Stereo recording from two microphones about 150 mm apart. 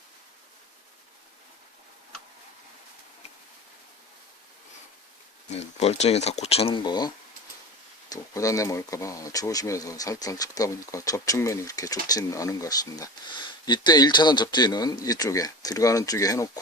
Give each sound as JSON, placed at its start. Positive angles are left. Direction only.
{"t": 5.5, "sound": "speech", "side_deg": 45}
{"t": 8.1, "sound": "speech", "side_deg": 20}